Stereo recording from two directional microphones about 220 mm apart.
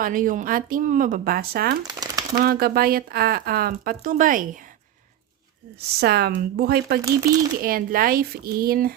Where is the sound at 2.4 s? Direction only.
45° right (ahead or behind).